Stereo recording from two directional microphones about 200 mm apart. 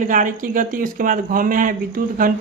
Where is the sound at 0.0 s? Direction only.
40° right (ahead or behind).